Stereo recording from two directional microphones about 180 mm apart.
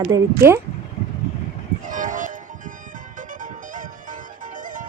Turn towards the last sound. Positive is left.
turn(degrees=-45)  # may be behind; listen again after turning